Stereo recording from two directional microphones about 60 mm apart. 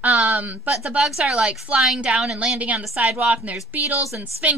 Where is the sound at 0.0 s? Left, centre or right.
Right.